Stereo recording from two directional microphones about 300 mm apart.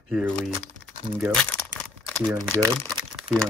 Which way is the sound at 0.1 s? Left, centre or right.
Centre.